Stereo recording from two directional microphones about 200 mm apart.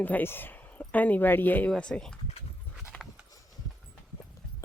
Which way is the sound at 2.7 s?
Centre (ahead or behind).